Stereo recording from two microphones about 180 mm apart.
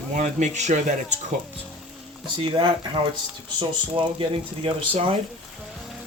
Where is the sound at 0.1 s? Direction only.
40° right (ahead or behind).